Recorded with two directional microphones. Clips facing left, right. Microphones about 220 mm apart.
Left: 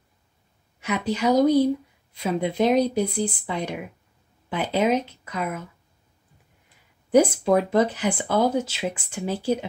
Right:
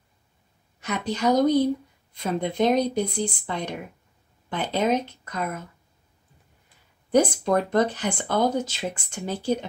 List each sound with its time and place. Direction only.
0.7 s speech: 5° left (ahead or behind)
7.1 s speech: 5° left (ahead or behind)